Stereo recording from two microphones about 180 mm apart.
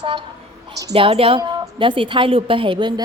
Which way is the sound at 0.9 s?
30° right (ahead or behind).